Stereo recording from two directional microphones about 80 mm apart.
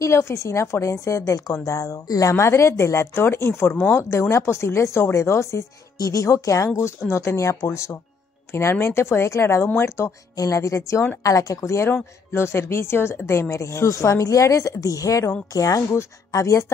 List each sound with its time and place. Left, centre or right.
0.0 s a woman's voice: left
10.3 s a woman's voice: left